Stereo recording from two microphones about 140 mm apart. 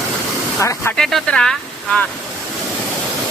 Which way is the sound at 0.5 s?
20° left (ahead or behind).